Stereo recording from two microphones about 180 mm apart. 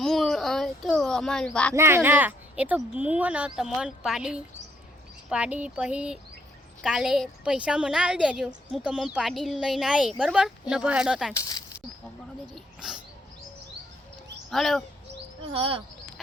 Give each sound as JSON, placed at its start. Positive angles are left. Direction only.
{"t": 0.0, "sound": "a sound", "side_deg": 0}
{"t": 1.7, "sound": "speech", "side_deg": -15}
{"t": 12.5, "sound": "speech", "side_deg": 0}
{"t": 14.5, "sound": "speech", "side_deg": 0}
{"t": 15.5, "sound": "speech", "side_deg": -30}